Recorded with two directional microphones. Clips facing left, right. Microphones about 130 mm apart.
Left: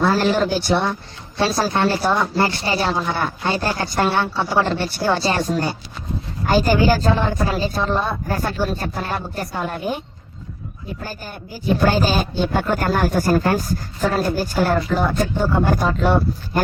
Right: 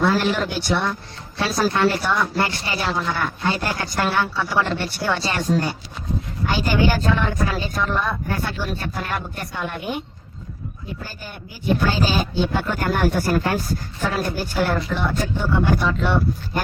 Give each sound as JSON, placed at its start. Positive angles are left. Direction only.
{"t": 0.0, "sound": "a woman's voice", "side_deg": 35}
{"t": 11.0, "sound": "a woman's voice", "side_deg": 45}